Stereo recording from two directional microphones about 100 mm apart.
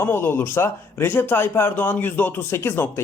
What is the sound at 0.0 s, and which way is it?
A man's voice, 20° left (ahead or behind).